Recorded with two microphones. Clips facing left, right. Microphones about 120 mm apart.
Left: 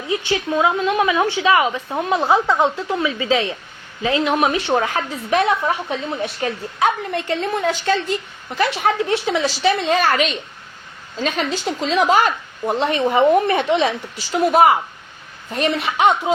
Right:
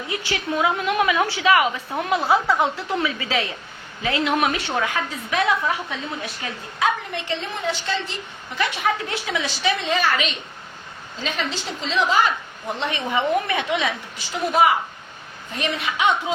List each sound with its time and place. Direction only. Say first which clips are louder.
0.1 s a woman's voice: left 6 dB; 25° left (ahead or behind)
4.4 s a woman's voice: left 5 dB; 30° left (ahead or behind)
7.1 s a woman's voice: left 7 dB; 45° left (ahead or behind)
8.5 s a woman's voice: left 5 dB; 35° left (ahead or behind)
15.5 s a woman's voice: left 6 dB; 40° left (ahead or behind)